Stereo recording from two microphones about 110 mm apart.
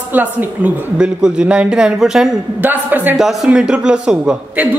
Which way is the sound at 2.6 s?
20° right (ahead or behind).